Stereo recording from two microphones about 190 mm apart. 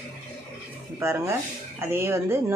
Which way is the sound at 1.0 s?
15° right (ahead or behind).